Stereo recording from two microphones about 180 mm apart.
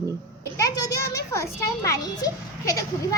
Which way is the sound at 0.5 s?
20° left (ahead or behind).